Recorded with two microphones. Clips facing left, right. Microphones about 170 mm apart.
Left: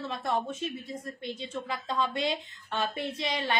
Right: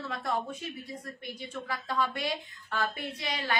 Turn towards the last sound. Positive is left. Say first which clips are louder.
# left 3 dB
turn(degrees=20)  # may be behind; listen again after turning